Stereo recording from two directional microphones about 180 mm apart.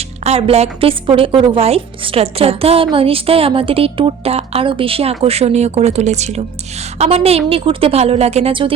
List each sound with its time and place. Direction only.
0.3 s a woman's voice: 35° right (ahead or behind)